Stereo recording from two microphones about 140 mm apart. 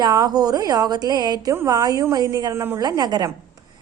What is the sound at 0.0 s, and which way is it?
A woman's voice, 30° right (ahead or behind).